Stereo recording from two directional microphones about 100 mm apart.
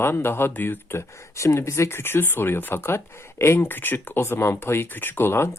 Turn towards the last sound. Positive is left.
turn(degrees=25)  # may be behind; listen again after turning